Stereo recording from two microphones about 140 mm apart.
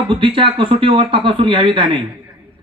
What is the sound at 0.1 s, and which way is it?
Speech, 40° right (ahead or behind).